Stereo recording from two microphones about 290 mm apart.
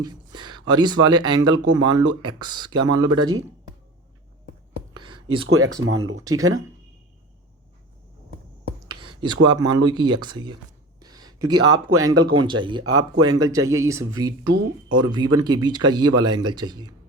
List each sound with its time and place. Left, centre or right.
0.0 s a sound: centre
1.0 s speech: centre
4.9 s whispering: centre
5.5 s speech: right
6.2 s speech: centre
9.0 s speech: centre